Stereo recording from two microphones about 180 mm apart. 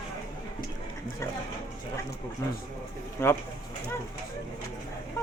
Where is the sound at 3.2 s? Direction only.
15° left (ahead or behind).